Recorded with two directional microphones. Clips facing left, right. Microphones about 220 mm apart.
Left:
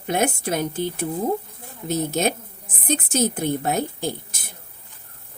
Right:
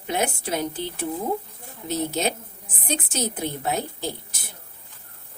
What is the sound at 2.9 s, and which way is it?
Speech, 45° left (ahead or behind).